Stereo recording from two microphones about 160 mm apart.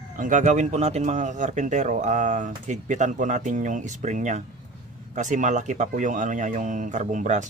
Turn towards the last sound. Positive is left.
turn(degrees=-50)  # may be behind; listen again after turning